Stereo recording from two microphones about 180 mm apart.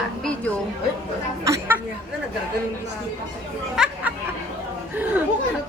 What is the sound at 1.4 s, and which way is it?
Speech, 15° right (ahead or behind).